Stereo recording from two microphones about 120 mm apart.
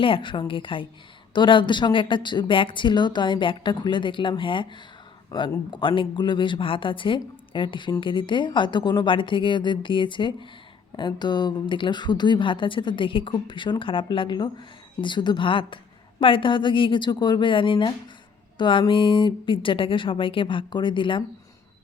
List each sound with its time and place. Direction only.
0.0 s a woman's voice: 45° left (ahead or behind)